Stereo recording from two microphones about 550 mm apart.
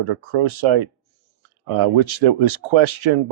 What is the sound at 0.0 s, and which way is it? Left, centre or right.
Speech, right.